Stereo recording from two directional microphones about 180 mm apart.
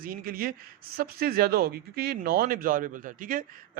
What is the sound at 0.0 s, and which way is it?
Speech, 50° right (ahead or behind).